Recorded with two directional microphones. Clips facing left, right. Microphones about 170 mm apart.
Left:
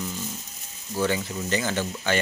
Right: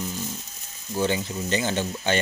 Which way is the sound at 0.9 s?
25° right (ahead or behind).